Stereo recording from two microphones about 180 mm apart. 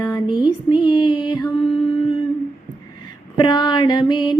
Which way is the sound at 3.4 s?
25° left (ahead or behind).